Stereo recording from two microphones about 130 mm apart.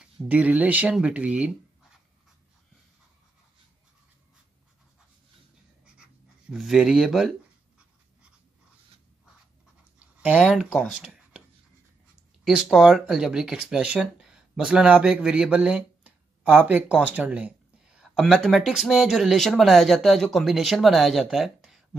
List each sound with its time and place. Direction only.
0.0 s speech: 10° right (ahead or behind)
6.5 s speech: 5° right (ahead or behind)
10.4 s speech: 5° right (ahead or behind)
12.4 s speech: centre (ahead or behind)